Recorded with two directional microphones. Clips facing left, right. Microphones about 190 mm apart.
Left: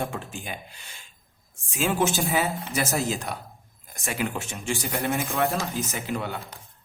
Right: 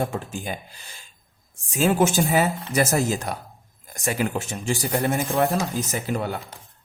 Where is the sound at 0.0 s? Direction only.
40° right (ahead or behind).